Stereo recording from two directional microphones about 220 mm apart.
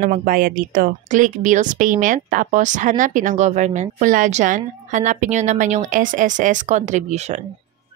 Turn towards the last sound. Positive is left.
turn(degrees=-30)  # may be behind; listen again after turning